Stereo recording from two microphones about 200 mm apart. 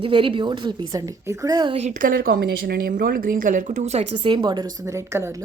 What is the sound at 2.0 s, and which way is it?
A woman's voice, 45° right (ahead or behind).